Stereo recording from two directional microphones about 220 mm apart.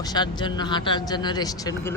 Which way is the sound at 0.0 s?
20° left (ahead or behind).